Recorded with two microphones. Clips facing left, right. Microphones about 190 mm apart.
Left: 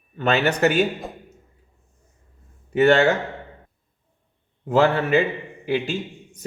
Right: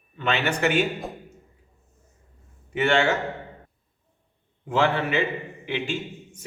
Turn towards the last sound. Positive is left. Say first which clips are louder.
# left 5 dB
turn(degrees=40)  # may be behind; listen again after turning